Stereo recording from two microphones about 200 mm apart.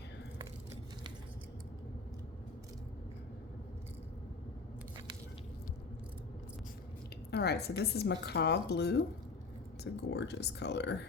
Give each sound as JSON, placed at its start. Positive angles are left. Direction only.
{"t": 7.3, "sound": "a woman's voice", "side_deg": 55}